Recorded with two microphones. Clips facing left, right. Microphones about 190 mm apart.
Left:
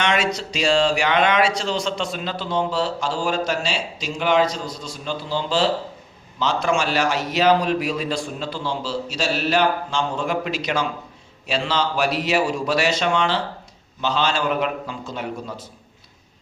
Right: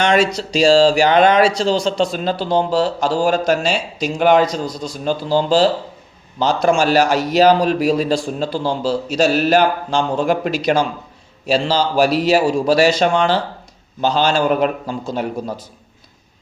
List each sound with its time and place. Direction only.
0.0 s a man's voice: 35° right (ahead or behind)